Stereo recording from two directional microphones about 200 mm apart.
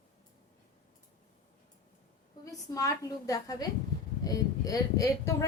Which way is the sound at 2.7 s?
15° left (ahead or behind).